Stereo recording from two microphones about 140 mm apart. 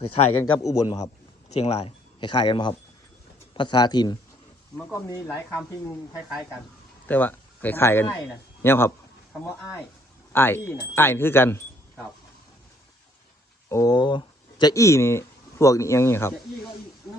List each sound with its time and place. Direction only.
0.0 s a man's voice: 45° left (ahead or behind)
0.6 s speech: 25° left (ahead or behind)
1.5 s speech: 45° left (ahead or behind); by 4.2 s 30° left (ahead or behind)
4.8 s speech: 20° left (ahead or behind)
7.1 s speech: 15° left (ahead or behind)
10.3 s speech: 15° left (ahead or behind)
13.7 s speech: 20° left (ahead or behind)
13.9 s speech: 30° left (ahead or behind)